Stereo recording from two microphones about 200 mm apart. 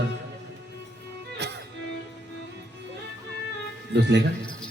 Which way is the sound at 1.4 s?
55° right (ahead or behind).